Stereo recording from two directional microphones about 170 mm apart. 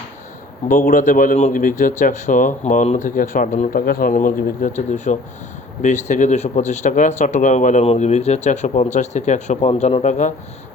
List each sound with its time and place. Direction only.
0.7 s speech: 55° left (ahead or behind)